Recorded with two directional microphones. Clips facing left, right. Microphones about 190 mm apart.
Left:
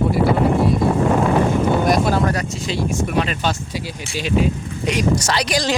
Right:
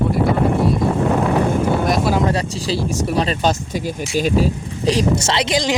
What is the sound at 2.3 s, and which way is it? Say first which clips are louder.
Speech: right 3 dB; 30° right (ahead or behind).